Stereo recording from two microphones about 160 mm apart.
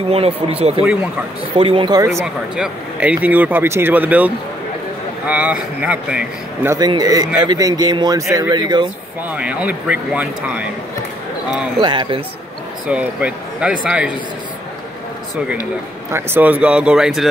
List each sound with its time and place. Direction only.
0.1 s speech: 40° right (ahead or behind); by 2.2 s 20° right (ahead or behind)
2.2 s a man's voice: 5° right (ahead or behind)
6.7 s speech: 25° right (ahead or behind)
9.3 s a man's voice: 10° right (ahead or behind)
11.8 s speech: 30° right (ahead or behind)
12.8 s speech: 10° right (ahead or behind)
16.1 s a man's voice: 15° right (ahead or behind)